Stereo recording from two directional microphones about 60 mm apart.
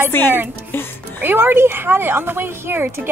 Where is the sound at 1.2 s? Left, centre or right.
Right.